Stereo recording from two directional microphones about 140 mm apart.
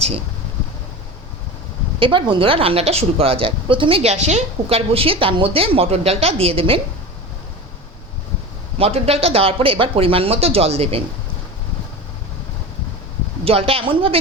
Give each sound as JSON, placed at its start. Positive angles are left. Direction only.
{"t": 2.0, "sound": "a woman's voice", "side_deg": -35}
{"t": 8.8, "sound": "a woman's voice", "side_deg": -45}
{"t": 13.4, "sound": "a woman's voice", "side_deg": -45}